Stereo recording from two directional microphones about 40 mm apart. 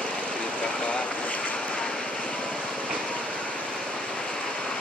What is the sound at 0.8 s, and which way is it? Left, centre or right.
Speech, left.